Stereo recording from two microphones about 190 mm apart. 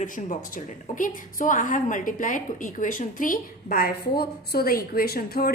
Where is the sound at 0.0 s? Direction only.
40° left (ahead or behind).